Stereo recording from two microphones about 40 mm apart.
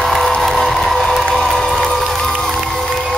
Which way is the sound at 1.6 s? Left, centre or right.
Centre.